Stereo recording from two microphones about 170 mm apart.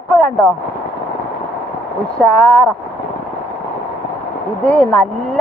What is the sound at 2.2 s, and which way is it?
Speech, 5° left (ahead or behind).